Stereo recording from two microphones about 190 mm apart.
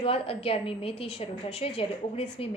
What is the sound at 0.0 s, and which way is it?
A woman's voice, 30° left (ahead or behind).